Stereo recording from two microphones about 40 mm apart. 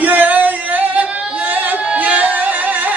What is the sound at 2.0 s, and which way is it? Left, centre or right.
Music, right.